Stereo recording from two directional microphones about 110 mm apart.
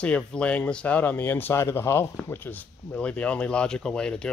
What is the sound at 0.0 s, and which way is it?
Speech, 10° left (ahead or behind).